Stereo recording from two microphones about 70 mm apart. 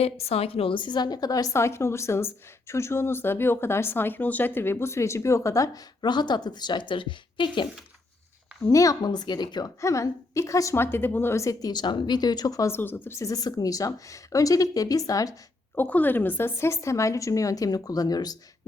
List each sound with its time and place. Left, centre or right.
0.9 s speech: left
1.5 s a woman's voice: left
6.0 s speech: left
8.6 s speech: left
9.0 s speech: left
9.8 s speech: left
10.8 s a woman's voice: left
11.3 s speech: left
11.7 s speech: left
12.6 s a woman's voice: left
13.1 s speech: left
15.7 s speech: left